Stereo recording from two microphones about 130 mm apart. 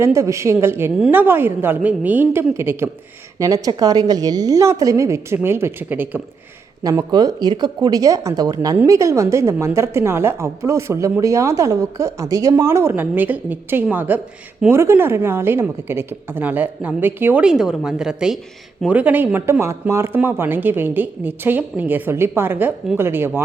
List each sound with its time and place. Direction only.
0.0 s a woman's voice: 25° right (ahead or behind)
6.8 s a woman's voice: 30° right (ahead or behind)
17.4 s a woman's voice: 5° right (ahead or behind)